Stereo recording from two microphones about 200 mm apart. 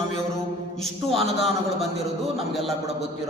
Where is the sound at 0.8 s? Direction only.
Centre (ahead or behind).